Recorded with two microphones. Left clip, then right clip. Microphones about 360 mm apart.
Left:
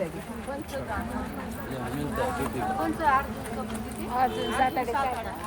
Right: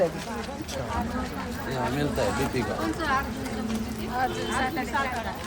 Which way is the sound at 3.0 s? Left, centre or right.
Centre.